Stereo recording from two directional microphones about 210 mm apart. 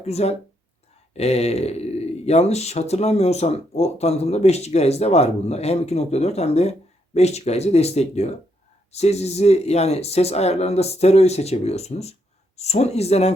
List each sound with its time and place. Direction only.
0.0 s speech: 30° left (ahead or behind)